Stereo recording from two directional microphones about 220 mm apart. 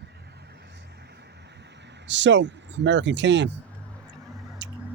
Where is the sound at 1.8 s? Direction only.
55° right (ahead or behind).